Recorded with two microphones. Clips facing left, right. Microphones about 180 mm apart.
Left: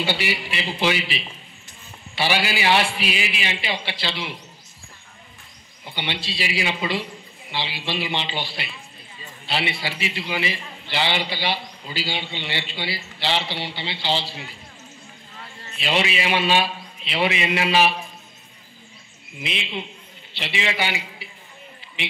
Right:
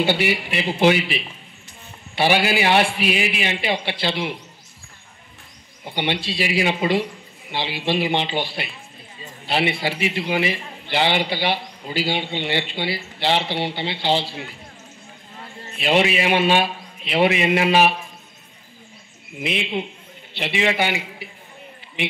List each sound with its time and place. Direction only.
0.0 s a man's voice: 55° right (ahead or behind)
5.9 s a man's voice: 50° right (ahead or behind)
15.7 s a man's voice: 50° right (ahead or behind)
19.3 s a man's voice: 50° right (ahead or behind)